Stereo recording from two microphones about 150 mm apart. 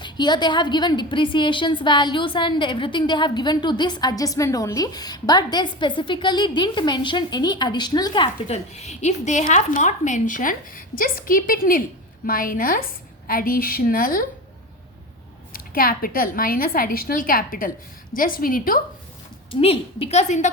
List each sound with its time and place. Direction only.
0.0 s a woman's voice: 30° left (ahead or behind)
8.5 s a woman's voice: 45° left (ahead or behind); by 14.3 s 70° left (ahead or behind)
15.5 s a woman's voice: 75° left (ahead or behind)
19.5 s a woman's voice: 40° left (ahead or behind)